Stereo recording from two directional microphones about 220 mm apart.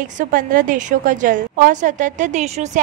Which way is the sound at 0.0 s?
40° right (ahead or behind).